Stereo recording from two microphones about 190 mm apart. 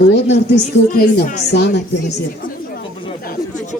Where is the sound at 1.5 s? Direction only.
60° left (ahead or behind).